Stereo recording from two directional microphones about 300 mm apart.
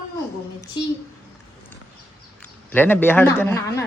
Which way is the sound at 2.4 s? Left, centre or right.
Centre.